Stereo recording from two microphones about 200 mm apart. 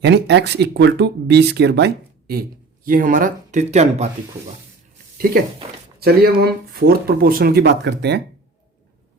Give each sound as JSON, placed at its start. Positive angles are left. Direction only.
{"t": 0.0, "sound": "speech", "side_deg": -55}
{"t": 2.8, "sound": "speech", "side_deg": -45}
{"t": 5.1, "sound": "speech", "side_deg": -45}